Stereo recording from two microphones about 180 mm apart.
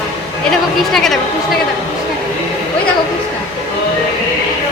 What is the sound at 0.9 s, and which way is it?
Speech, centre (ahead or behind).